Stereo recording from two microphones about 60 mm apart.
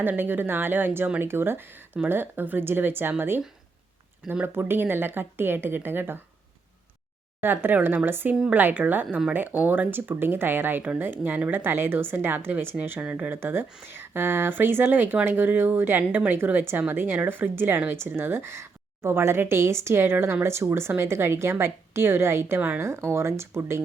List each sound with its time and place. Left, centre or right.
0.0 s speech: right
4.4 s speech: right
7.4 s speech: right
13.0 s speech: right
13.4 s speech: right